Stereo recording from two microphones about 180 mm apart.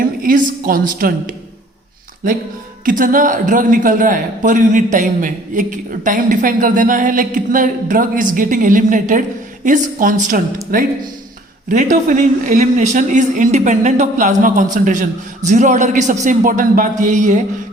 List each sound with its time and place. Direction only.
0.0 s a woman's voice: 50° right (ahead or behind)
2.8 s a man's voice: 50° right (ahead or behind)